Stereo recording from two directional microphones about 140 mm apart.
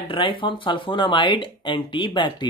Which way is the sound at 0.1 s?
35° left (ahead or behind).